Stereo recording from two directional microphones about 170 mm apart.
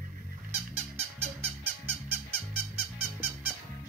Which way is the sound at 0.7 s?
40° right (ahead or behind).